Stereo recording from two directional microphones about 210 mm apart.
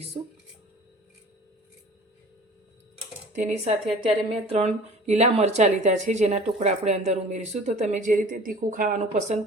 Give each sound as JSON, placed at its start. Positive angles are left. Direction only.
{"t": 2.9, "sound": "speech", "side_deg": -30}